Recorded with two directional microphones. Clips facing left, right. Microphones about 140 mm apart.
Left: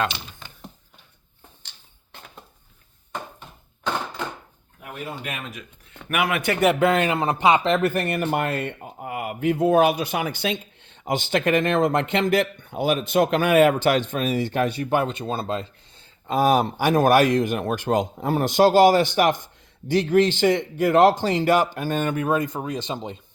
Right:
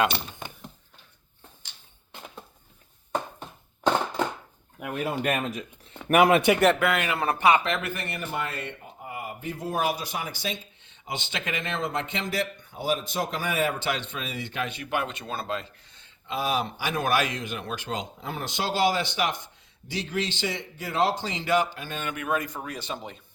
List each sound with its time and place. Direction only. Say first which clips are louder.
5.2 s speech: right 7 dB; 50° right (ahead or behind)
5.5 s speech: right 4 dB; 35° right (ahead or behind)
6.7 s speech: left 6 dB; 25° left (ahead or behind)
7.6 s speech: left 9 dB; 35° left (ahead or behind)
8.2 s speech: left 8 dB; 65° left (ahead or behind)
13.7 s speech: left 10 dB; 45° left (ahead or behind); by 16.0 s 30° left (ahead or behind)
16.2 s speech: left 9 dB; 45° left (ahead or behind); by 23.1 s 20° left (ahead or behind)